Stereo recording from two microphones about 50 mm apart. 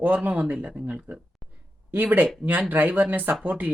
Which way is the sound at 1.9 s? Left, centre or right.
Right.